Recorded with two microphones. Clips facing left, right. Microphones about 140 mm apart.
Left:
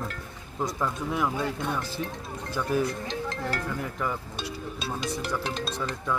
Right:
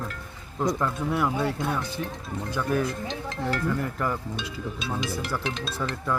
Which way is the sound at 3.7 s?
5° left (ahead or behind).